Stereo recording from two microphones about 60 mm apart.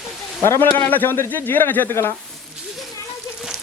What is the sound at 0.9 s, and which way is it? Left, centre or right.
Speech, left.